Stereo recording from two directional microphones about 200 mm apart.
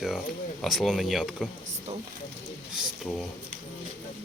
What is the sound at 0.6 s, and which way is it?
Speech, centre (ahead or behind).